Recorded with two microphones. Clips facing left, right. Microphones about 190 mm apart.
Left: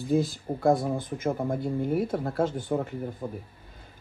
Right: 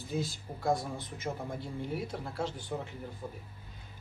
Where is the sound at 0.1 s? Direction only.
55° left (ahead or behind).